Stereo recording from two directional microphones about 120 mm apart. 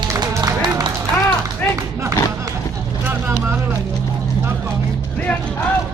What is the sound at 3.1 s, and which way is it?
Vehicle, 20° right (ahead or behind).